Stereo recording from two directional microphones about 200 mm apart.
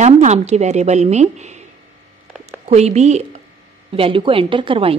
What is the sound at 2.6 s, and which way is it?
A woman's voice, 35° right (ahead or behind).